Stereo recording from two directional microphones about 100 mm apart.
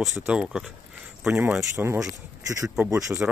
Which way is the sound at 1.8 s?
25° right (ahead or behind).